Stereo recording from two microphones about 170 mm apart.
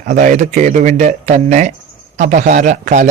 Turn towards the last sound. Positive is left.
turn(degrees=-45)  # may be behind; listen again after turning